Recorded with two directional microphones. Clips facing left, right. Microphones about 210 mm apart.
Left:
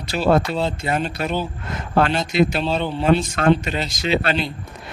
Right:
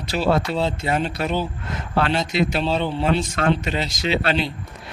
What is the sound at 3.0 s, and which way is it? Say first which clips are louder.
A man's voice: left 6 dB; 50° left (ahead or behind).